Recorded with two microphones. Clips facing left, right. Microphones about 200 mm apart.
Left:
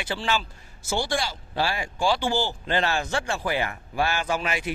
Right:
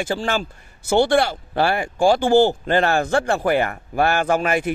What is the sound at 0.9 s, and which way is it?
Speech, 60° right (ahead or behind).